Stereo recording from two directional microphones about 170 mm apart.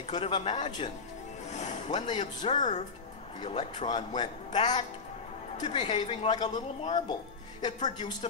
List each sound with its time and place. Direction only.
0.1 s a man's voice: 35° left (ahead or behind)
1.5 s music: 45° left (ahead or behind)
2.0 s speech: 30° left (ahead or behind)
2.5 s speech: 45° left (ahead or behind)
3.3 s speech: 30° left (ahead or behind)
7.6 s speech: 25° left (ahead or behind)